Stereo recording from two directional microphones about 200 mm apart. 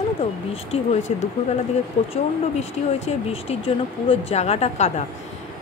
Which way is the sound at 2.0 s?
30° left (ahead or behind).